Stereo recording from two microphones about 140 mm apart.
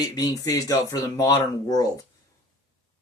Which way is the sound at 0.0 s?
25° left (ahead or behind).